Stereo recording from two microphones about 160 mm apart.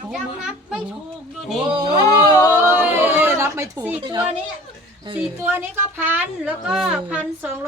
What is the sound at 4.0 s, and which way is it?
Speech, 25° right (ahead or behind).